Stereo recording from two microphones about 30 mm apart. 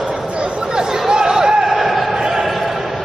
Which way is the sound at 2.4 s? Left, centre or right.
Centre.